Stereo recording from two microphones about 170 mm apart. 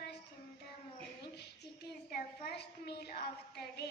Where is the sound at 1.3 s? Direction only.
75° left (ahead or behind).